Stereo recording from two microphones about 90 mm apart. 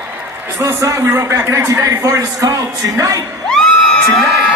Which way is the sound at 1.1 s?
25° right (ahead or behind).